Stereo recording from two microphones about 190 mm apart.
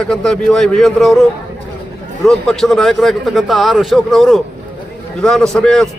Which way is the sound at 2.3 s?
5° left (ahead or behind).